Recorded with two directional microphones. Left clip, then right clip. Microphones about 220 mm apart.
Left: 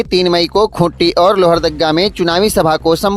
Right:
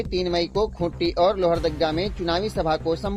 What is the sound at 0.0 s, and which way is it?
Speech, 40° left (ahead or behind).